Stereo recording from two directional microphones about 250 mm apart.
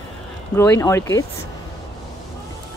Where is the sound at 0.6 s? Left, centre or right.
Centre.